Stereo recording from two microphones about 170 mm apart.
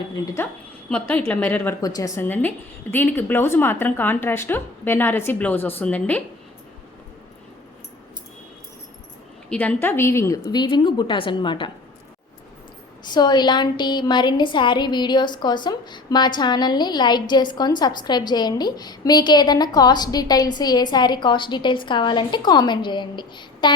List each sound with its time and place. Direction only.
0.2 s a woman's voice: 25° left (ahead or behind)
0.9 s speech: 10° left (ahead or behind)
9.5 s a woman's voice: 10° left (ahead or behind); by 11.7 s 25° left (ahead or behind)
13.1 s a woman's voice: 25° left (ahead or behind)